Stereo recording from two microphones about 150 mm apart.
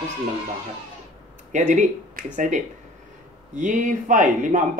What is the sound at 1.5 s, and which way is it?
Speech, 55° right (ahead or behind).